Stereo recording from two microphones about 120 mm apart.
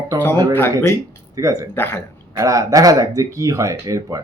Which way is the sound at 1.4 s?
25° right (ahead or behind).